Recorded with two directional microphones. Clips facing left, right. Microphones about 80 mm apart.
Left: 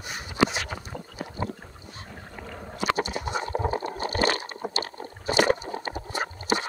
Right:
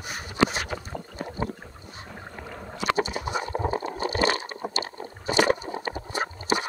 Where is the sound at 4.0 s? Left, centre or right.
Left.